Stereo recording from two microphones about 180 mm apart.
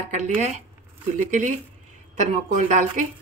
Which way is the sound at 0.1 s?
40° right (ahead or behind).